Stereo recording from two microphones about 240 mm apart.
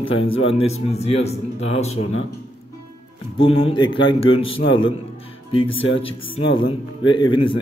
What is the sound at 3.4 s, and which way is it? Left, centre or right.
A man's voice, left.